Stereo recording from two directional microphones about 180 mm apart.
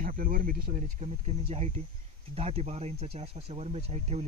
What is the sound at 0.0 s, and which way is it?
Speech, 50° right (ahead or behind).